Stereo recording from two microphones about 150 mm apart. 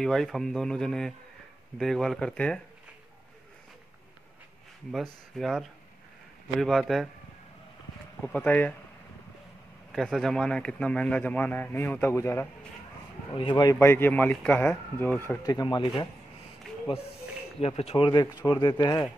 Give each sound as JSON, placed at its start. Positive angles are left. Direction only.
{"t": 0.0, "sound": "speech", "side_deg": 0}
{"t": 4.9, "sound": "speech", "side_deg": 0}
{"t": 8.2, "sound": "a man's voice", "side_deg": 10}
{"t": 9.9, "sound": "a man's voice", "side_deg": 5}
{"t": 13.3, "sound": "speech", "side_deg": 30}
{"t": 13.7, "sound": "a man's voice", "side_deg": 15}
{"t": 15.4, "sound": "speech", "side_deg": 25}
{"t": 17.6, "sound": "speech", "side_deg": 40}